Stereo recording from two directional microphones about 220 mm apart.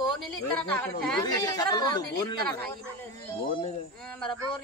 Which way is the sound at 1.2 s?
20° left (ahead or behind).